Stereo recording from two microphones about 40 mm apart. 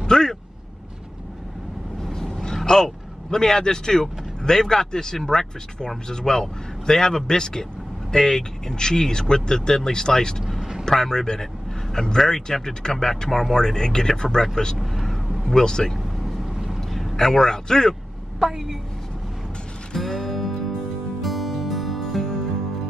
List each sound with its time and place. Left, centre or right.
0.0 s speech: centre
2.0 s vehicle: centre
2.4 s speech: centre
10.6 s vehicle: centre
10.9 s speech: centre
14.8 s speech: centre
16.3 s vehicle: centre
16.9 s a man's voice: centre
18.4 s a woman's voice: centre
19.9 s music: centre
20.2 s music: centre